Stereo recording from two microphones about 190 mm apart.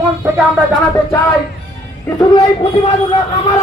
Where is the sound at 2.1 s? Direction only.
20° left (ahead or behind).